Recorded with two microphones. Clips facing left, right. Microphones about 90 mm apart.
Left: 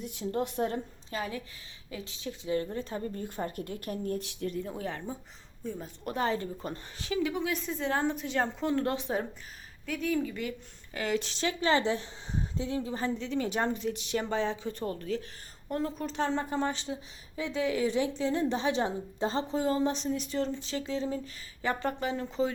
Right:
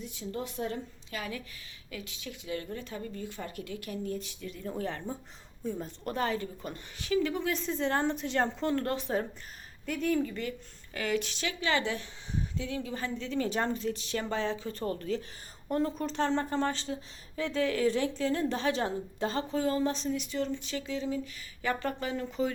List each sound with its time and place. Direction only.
0.0 s a woman's voice: 55° left (ahead or behind)
1.1 s speech: 30° left (ahead or behind); by 4.2 s 45° left (ahead or behind)
4.2 s speech: 70° left (ahead or behind)
4.5 s speech: 5° left (ahead or behind)
5.6 s a woman's voice: 5° right (ahead or behind)
6.1 s speech: 20° left (ahead or behind)
7.2 s a woman's voice: 15° left (ahead or behind)
8.7 s speech: 20° left (ahead or behind)
9.8 s a woman's voice: centre (ahead or behind)
10.9 s speech: 25° left (ahead or behind)
13.1 s speech: 15° left (ahead or behind)
14.8 s a woman's voice: centre (ahead or behind); by 20.1 s 20° left (ahead or behind)
20.1 s speech: 35° left (ahead or behind)